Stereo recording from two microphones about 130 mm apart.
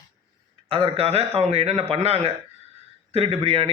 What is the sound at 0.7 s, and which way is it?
Speech, 50° right (ahead or behind).